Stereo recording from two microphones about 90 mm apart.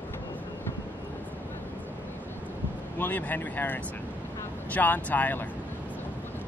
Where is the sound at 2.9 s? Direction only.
20° left (ahead or behind).